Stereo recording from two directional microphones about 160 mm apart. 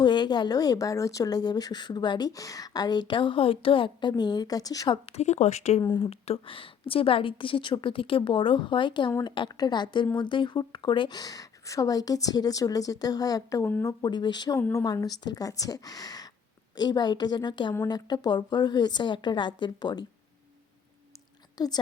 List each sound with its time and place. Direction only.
0.0 s a woman's voice: 30° left (ahead or behind)
5.0 s speech: 45° left (ahead or behind)
5.8 s a woman's voice: 25° left (ahead or behind)
6.1 s a woman's voice: 40° left (ahead or behind)
21.6 s a woman's voice: 25° left (ahead or behind)